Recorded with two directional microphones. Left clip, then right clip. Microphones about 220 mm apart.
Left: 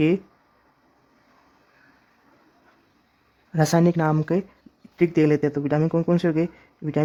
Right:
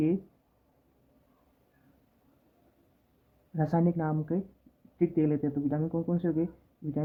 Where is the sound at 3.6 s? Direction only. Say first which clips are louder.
Left 9 dB; 40° left (ahead or behind).